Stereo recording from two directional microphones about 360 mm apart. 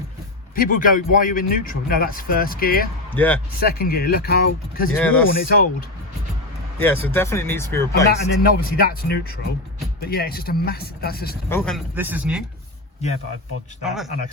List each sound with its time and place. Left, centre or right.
0.5 s a man's voice: left
3.2 s speech: centre
3.6 s a man's voice: left
6.7 s speech: centre
8.0 s a man's voice: left
11.4 s speech: centre
13.8 s speech: centre